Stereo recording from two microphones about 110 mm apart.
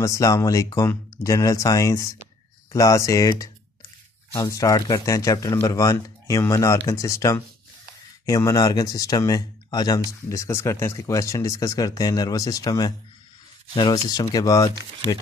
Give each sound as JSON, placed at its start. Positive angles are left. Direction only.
{"t": 0.0, "sound": "speech", "side_deg": 30}